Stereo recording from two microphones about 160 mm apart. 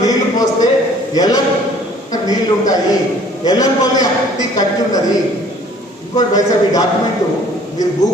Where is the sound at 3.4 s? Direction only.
25° left (ahead or behind).